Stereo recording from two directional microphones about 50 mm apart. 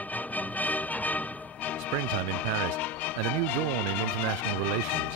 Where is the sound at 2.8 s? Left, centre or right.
Left.